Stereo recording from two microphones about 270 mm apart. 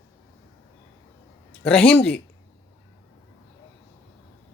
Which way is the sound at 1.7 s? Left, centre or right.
Centre.